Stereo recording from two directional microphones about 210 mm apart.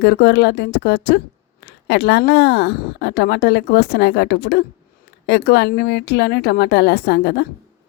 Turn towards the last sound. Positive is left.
turn(degrees=55)  # may be behind; listen again after turning